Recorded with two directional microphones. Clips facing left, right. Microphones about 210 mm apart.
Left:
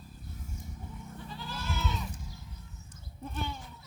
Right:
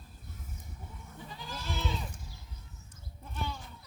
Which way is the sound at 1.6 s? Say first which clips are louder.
Even; 30° right (ahead or behind).